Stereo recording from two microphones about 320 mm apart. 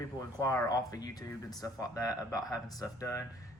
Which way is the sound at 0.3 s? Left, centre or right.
Centre.